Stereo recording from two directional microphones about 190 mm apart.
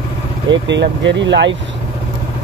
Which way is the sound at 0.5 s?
70° right (ahead or behind).